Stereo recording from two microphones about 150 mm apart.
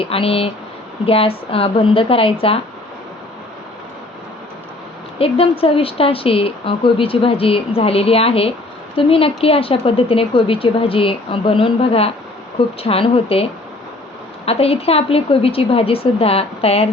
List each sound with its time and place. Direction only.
0.0 s a woman's voice: 40° left (ahead or behind)
5.2 s a woman's voice: 40° left (ahead or behind)